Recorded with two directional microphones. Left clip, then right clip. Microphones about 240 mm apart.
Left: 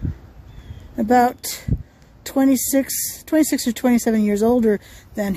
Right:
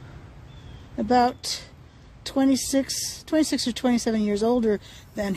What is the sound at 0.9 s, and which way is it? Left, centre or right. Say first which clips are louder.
Speech: left 5 dB; left.